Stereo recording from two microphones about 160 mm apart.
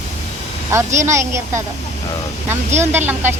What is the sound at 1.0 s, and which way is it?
Speech, 15° right (ahead or behind).